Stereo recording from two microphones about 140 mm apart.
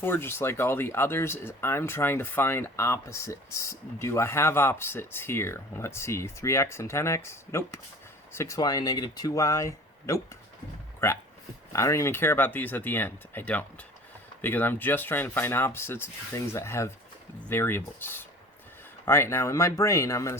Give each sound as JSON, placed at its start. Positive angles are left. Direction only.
{"t": 0.0, "sound": "speech", "side_deg": 15}